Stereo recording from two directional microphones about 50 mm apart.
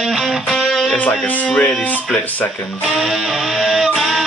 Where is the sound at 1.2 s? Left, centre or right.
Left.